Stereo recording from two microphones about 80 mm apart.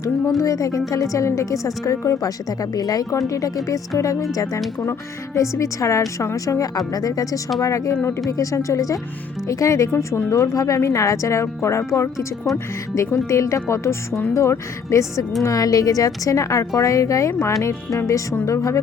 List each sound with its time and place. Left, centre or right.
0.3 s a woman's voice: left
13.2 s a woman's voice: left